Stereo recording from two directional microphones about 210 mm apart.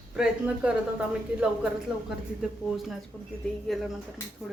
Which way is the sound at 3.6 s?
Centre (ahead or behind).